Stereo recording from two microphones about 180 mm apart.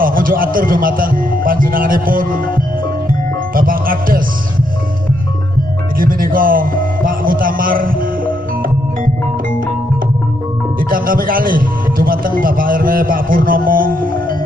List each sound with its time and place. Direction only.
0.0 s speech: 50° right (ahead or behind)
3.1 s music: 50° right (ahead or behind)
5.9 s a man's voice: 50° right (ahead or behind)
10.8 s speech: 50° right (ahead or behind)